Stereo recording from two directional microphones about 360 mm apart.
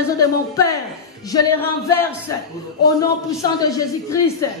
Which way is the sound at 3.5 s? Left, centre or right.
Centre.